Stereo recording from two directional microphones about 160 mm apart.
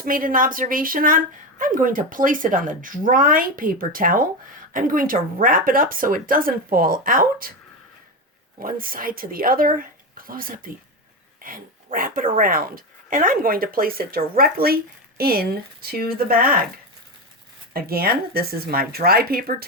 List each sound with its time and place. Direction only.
0.0 s a woman's voice: 60° right (ahead or behind)
8.5 s a woman's voice: 60° right (ahead or behind)
17.7 s speech: 70° right (ahead or behind)